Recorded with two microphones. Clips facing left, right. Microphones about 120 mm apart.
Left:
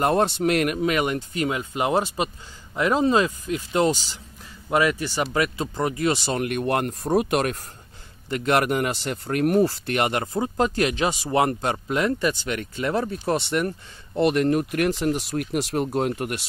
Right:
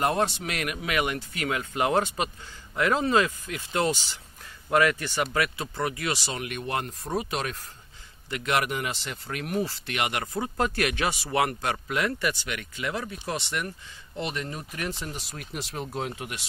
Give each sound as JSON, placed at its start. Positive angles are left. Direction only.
{"t": 0.0, "sound": "speech", "side_deg": 40}
{"t": 6.2, "sound": "speech", "side_deg": 50}
{"t": 8.3, "sound": "speech", "side_deg": 40}
{"t": 10.2, "sound": "speech", "side_deg": 20}